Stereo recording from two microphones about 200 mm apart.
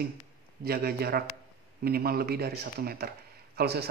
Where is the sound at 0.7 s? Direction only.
50° right (ahead or behind).